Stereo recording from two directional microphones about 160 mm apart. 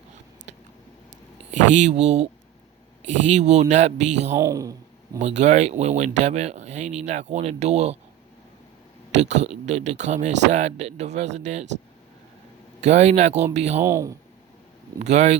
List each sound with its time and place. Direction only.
1.5 s speech: 45° right (ahead or behind)
3.2 s speech: 45° right (ahead or behind)
4.4 s speech: 20° right (ahead or behind)
5.4 s speech: 45° right (ahead or behind)
9.3 s speech: 45° right (ahead or behind)
12.8 s speech: 45° right (ahead or behind)
13.8 s speech: 20° right (ahead or behind)
14.9 s speech: 45° right (ahead or behind)